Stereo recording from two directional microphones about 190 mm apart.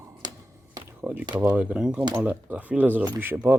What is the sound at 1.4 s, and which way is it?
Speech, 10° right (ahead or behind).